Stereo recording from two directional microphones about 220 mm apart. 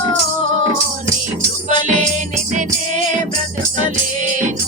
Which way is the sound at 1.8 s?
35° right (ahead or behind).